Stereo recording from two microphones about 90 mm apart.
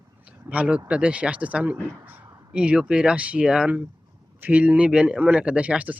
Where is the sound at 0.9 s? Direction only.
15° right (ahead or behind).